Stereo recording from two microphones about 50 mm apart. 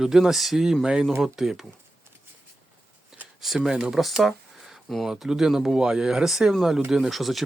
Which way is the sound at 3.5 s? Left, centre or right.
Centre.